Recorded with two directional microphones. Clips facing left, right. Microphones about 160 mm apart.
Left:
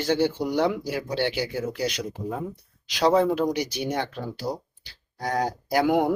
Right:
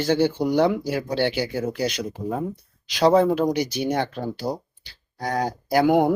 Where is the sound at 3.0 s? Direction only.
40° right (ahead or behind).